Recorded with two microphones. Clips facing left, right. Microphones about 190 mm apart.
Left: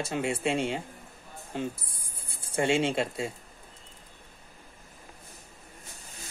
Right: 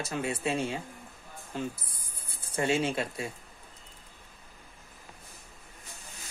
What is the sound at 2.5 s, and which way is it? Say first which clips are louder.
Speech: left 2 dB; 25° left (ahead or behind).